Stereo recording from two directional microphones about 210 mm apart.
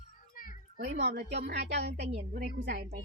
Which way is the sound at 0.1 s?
40° left (ahead or behind).